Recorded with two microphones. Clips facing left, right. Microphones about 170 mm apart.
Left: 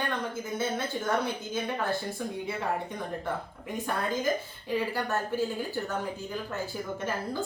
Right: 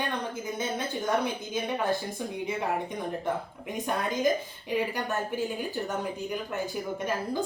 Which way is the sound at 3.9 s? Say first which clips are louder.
Right 2 dB; 15° right (ahead or behind).